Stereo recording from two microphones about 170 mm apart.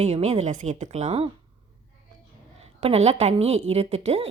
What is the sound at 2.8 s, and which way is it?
A woman's voice, 40° right (ahead or behind).